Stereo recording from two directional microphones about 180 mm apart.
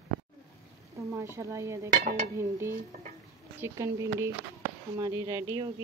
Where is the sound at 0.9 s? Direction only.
15° right (ahead or behind).